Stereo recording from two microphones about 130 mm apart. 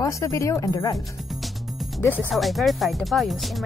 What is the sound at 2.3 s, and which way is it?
Speech, centre (ahead or behind).